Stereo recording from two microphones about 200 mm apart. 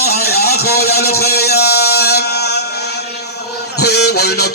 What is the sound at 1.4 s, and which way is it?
Music, 55° left (ahead or behind).